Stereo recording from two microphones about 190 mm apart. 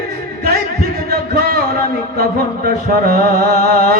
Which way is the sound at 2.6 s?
50° right (ahead or behind).